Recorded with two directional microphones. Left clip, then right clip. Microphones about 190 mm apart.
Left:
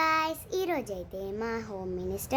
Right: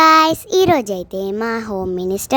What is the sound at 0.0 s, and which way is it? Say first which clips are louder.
A child's voice: right 17 dB; 55° right (ahead or behind).